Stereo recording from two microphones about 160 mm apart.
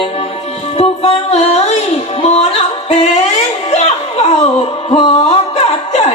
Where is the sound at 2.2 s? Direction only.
45° left (ahead or behind).